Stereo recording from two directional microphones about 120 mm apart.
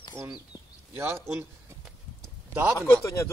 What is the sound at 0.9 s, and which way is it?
Speech, 20° right (ahead or behind).